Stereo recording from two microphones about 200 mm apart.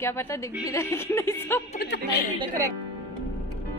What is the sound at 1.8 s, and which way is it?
Speech, 55° left (ahead or behind).